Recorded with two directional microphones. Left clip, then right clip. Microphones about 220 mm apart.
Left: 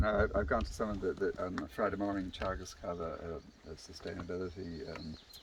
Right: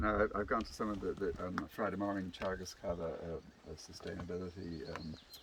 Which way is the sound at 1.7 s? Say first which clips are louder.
Left 4 dB; 10° left (ahead or behind).